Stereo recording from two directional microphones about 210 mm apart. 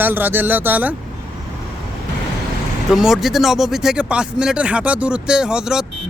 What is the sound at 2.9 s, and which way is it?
Speech, centre (ahead or behind).